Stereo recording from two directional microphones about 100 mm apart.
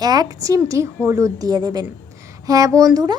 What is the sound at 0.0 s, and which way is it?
A woman's voice, 40° right (ahead or behind).